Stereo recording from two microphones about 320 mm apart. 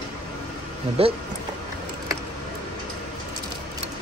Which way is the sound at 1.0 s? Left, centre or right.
Centre.